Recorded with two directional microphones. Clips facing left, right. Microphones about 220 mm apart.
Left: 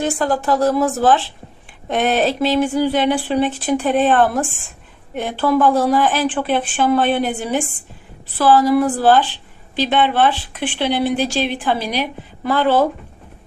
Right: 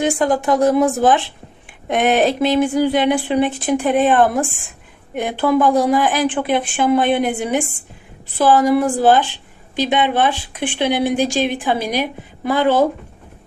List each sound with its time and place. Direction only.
0.0 s a woman's voice: 15° right (ahead or behind)